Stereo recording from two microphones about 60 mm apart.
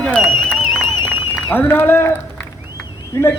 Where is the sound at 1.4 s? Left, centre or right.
Left.